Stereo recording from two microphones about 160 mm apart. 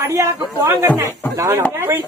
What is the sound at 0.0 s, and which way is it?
Speech, 20° right (ahead or behind).